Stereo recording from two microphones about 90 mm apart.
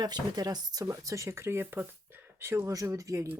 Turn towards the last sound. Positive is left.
turn(degrees=-35)  # may be behind; listen again after turning